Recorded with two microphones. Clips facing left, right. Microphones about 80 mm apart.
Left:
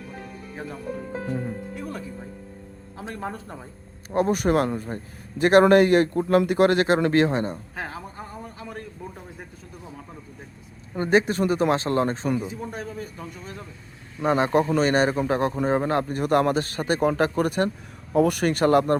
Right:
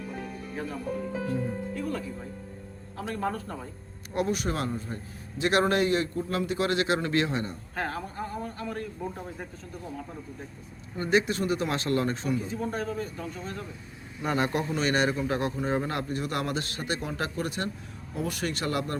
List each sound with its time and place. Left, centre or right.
1.7 s a man's voice: centre
4.3 s a man's voice: left
7.8 s a man's voice: centre
10.9 s a man's voice: left
12.4 s a man's voice: centre
14.2 s a man's voice: left
18.1 s speech: left